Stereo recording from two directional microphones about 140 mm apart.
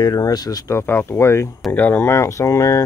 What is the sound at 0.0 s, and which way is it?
Speech, 30° left (ahead or behind).